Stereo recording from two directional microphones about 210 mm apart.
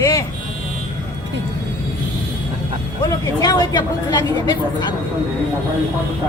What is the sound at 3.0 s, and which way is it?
Speech, 20° left (ahead or behind).